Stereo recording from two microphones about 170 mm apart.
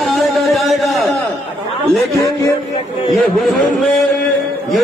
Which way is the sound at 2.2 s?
20° left (ahead or behind).